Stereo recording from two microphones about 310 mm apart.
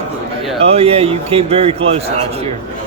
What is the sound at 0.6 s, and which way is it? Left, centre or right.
Speech, centre.